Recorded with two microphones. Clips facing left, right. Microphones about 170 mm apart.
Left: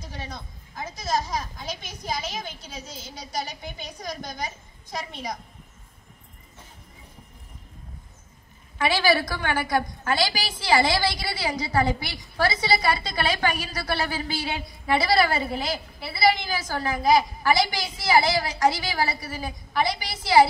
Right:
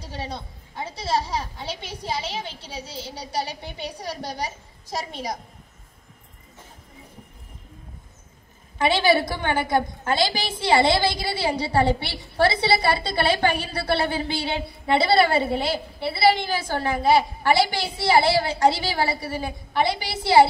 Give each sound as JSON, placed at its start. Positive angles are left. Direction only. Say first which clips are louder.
{"t": 0.0, "sound": "speech", "louder": "right 4 dB", "side_deg": -30}
{"t": 8.8, "sound": "a woman's voice", "louder": "right 3 dB", "side_deg": -25}